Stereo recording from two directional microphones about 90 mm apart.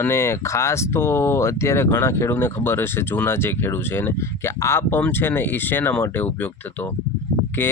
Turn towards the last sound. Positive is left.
turn(degrees=25)  # may be behind; listen again after turning